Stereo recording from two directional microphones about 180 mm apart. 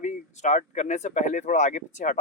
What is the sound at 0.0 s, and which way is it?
Speech, 40° left (ahead or behind).